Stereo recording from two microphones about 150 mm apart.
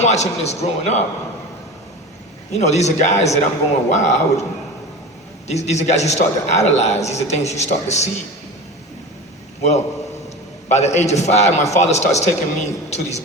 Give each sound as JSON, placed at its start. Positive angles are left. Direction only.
{"t": 0.0, "sound": "a man's voice", "side_deg": 50}
{"t": 2.5, "sound": "a man's voice", "side_deg": 50}
{"t": 5.5, "sound": "a man's voice", "side_deg": 50}
{"t": 9.6, "sound": "a man's voice", "side_deg": 50}